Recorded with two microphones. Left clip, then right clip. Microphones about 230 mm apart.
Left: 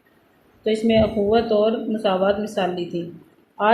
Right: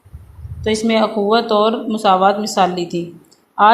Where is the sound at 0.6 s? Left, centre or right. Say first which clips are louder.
Right 3 dB; centre.